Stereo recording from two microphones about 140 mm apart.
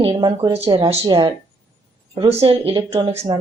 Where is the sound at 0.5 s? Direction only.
45° right (ahead or behind).